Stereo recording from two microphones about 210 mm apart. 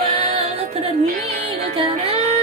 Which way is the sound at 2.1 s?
30° right (ahead or behind).